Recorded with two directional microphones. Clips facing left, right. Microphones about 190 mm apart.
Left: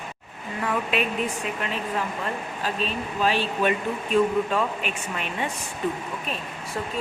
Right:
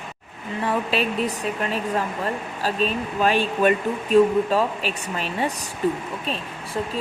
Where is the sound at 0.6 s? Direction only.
35° right (ahead or behind).